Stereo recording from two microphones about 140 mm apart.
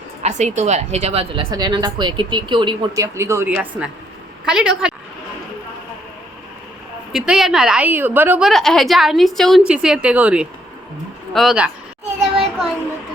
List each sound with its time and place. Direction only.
0.2 s a woman's voice: 55° right (ahead or behind)
1.5 s speech: 30° right (ahead or behind)
2.9 s a woman's voice: 20° right (ahead or behind)
7.1 s a woman's voice: centre (ahead or behind)
8.4 s a woman's voice: centre (ahead or behind)
12.4 s child singing: 5° right (ahead or behind)